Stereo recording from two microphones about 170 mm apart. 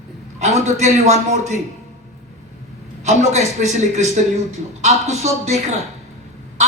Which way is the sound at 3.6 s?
50° right (ahead or behind).